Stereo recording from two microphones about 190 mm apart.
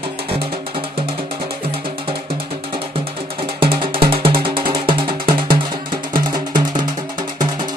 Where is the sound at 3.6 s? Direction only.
30° right (ahead or behind).